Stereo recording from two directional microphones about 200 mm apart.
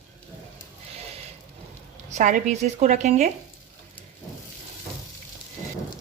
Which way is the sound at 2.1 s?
40° right (ahead or behind).